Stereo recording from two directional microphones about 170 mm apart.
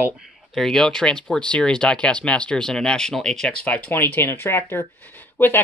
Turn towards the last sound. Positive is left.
turn(degrees=10)  # may be behind; listen again after turning